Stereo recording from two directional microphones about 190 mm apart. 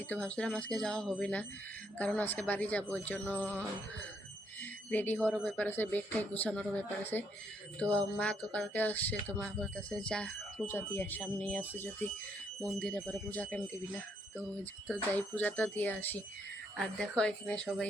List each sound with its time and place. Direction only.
0.1 s speech: 5° left (ahead or behind)
4.6 s speech: 10° left (ahead or behind)
14.6 s speech: 10° left (ahead or behind)